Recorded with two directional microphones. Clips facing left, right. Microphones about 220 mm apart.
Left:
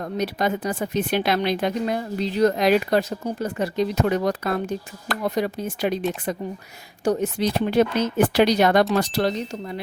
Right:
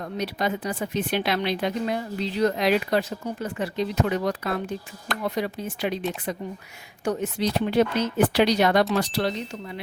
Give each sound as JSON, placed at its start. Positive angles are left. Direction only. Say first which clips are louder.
{"t": 0.0, "sound": "speech", "louder": "left 3 dB", "side_deg": 45}